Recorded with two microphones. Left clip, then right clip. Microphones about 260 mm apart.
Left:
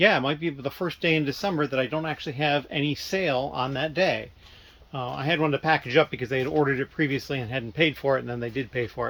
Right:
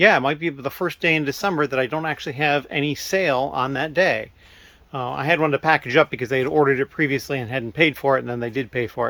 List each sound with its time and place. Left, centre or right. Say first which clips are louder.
0.0 s speech: right 5 dB; centre